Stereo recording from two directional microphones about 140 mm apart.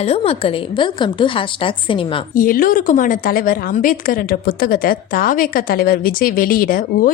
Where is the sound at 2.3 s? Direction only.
80° left.